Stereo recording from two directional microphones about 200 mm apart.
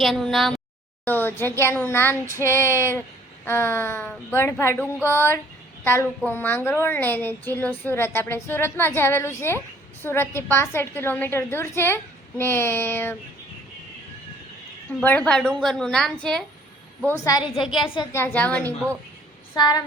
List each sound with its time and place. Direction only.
0.0 s a woman's voice: centre (ahead or behind)
15.0 s a woman's voice: 5° left (ahead or behind); by 18.0 s 25° left (ahead or behind)
18.1 s a woman's voice: 10° left (ahead or behind)
19.5 s speech: 20° left (ahead or behind)